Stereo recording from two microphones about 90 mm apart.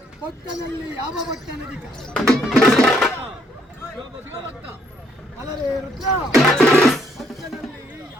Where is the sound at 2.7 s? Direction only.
5° left (ahead or behind).